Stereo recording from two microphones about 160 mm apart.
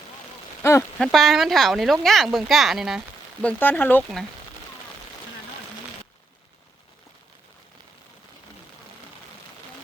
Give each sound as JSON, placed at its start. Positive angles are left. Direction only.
{"t": 0.6, "sound": "rain on surface", "side_deg": 15}
{"t": 0.9, "sound": "speech", "side_deg": 0}
{"t": 3.4, "sound": "speech", "side_deg": 10}